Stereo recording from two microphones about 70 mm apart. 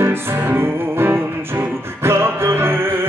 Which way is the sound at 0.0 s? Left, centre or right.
Right.